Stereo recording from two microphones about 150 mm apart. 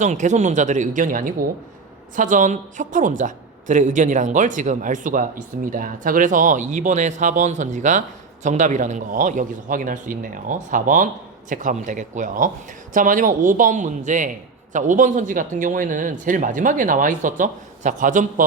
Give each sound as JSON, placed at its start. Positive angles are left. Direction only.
{"t": 0.0, "sound": "a man's voice", "side_deg": -55}